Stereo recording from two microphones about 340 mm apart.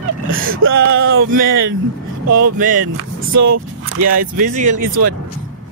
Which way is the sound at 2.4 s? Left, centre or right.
Right.